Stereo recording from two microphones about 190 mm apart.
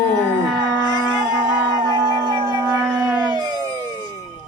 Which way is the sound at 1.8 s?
20° right (ahead or behind).